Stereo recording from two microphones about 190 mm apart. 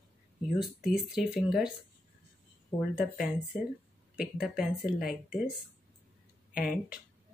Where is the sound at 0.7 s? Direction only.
Centre (ahead or behind).